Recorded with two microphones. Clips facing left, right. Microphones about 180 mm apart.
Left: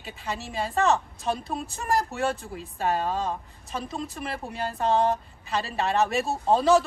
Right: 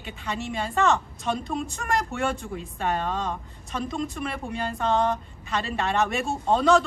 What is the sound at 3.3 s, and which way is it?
Speech, 5° left (ahead or behind).